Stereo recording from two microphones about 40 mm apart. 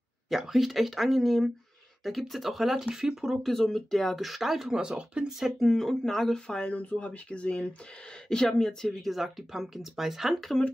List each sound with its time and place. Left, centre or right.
0.3 s speech: centre
3.4 s speech: centre
4.7 s speech: right
5.6 s speech: centre
6.4 s speech: left
6.8 s speech: left
7.1 s speech: left
8.3 s speech: centre
9.0 s speech: centre